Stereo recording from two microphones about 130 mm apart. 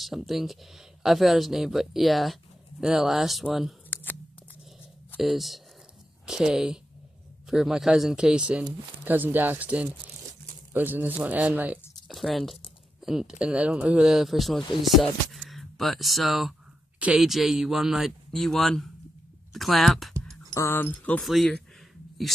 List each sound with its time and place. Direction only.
0.0 s speech: centre (ahead or behind)
3.9 s a sound: 15° left (ahead or behind)
5.1 s speech: centre (ahead or behind)
12.1 s speech: centre (ahead or behind)
20.5 s speech: 20° left (ahead or behind)
21.2 s speech: centre (ahead or behind)